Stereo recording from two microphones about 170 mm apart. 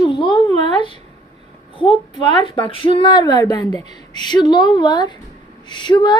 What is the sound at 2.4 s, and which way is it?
A woman's voice, 30° left (ahead or behind).